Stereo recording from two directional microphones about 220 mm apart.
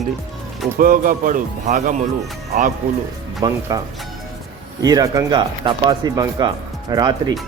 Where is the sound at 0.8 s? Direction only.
40° right (ahead or behind).